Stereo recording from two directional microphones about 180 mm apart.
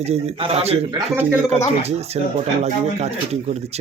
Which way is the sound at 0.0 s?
35° right (ahead or behind).